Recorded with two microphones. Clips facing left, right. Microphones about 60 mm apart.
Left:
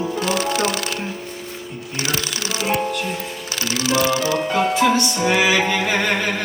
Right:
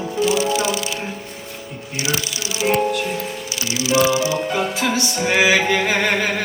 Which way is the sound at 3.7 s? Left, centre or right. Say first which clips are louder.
Right 2 dB; left.